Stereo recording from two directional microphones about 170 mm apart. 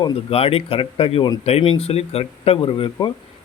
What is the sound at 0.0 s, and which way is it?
Speech, 35° left (ahead or behind).